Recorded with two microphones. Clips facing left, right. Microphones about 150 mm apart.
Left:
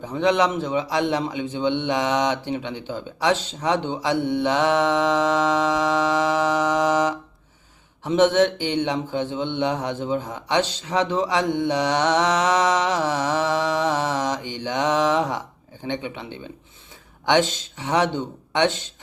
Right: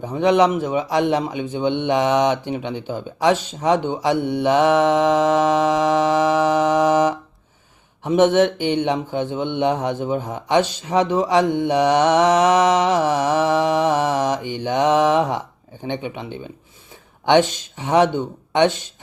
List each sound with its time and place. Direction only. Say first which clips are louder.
0.1 s a man's voice: right 4 dB; 15° right (ahead or behind)